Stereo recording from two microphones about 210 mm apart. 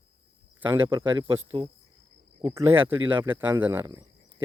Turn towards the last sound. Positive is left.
turn(degrees=-10)  # may be behind; listen again after turning